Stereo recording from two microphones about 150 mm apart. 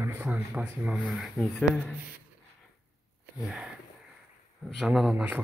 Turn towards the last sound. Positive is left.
turn(degrees=-5)  # may be behind; listen again after turning